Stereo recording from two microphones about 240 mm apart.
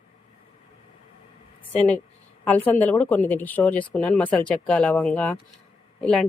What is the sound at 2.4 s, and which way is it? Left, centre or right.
Speech, centre.